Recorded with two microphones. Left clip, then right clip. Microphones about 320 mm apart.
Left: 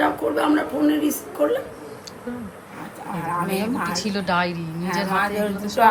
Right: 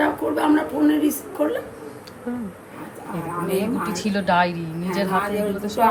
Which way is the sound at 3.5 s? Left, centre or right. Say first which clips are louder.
Right 1 dB; centre.